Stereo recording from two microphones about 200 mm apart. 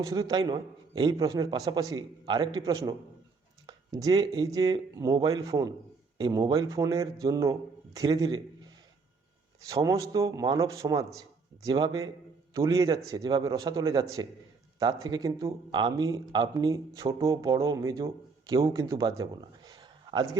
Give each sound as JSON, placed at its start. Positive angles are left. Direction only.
{"t": 0.0, "sound": "a man's voice", "side_deg": -15}
{"t": 9.6, "sound": "a man's voice", "side_deg": -15}